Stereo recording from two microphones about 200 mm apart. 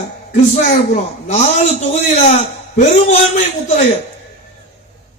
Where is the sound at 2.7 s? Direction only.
35° left (ahead or behind).